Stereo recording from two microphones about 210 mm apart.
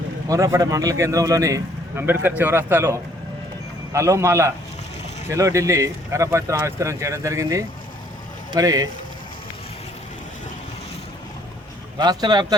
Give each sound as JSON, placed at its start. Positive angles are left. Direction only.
{"t": 0.3, "sound": "speech", "side_deg": -15}
{"t": 11.9, "sound": "speech", "side_deg": -20}